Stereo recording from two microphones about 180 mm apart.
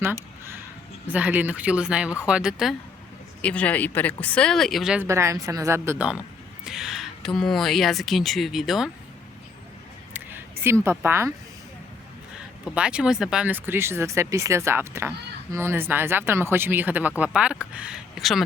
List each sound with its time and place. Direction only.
1.0 s speech: 10° right (ahead or behind)
5.0 s speech: 15° right (ahead or behind)
6.7 s speech: 5° right (ahead or behind)
10.1 s a sound: 10° right (ahead or behind)
10.8 s speech: 15° right (ahead or behind)
12.6 s speech: 5° right (ahead or behind)